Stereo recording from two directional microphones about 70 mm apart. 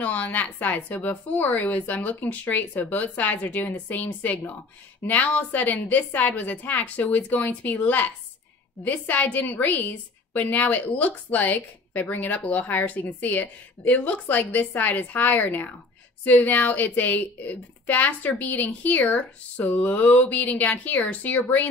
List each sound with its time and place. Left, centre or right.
0.0 s a woman's voice: left